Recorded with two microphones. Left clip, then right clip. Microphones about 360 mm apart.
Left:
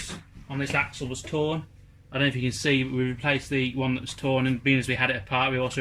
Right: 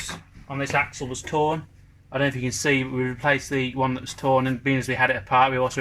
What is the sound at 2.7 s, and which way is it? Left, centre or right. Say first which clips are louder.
Speech: right 2 dB; right.